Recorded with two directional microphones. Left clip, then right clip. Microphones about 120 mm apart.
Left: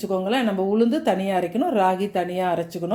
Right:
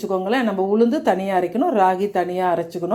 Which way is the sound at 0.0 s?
15° left (ahead or behind).